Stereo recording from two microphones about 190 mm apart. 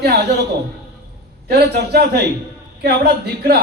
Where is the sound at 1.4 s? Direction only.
60° right (ahead or behind).